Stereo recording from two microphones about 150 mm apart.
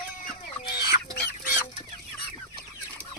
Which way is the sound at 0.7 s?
90° left.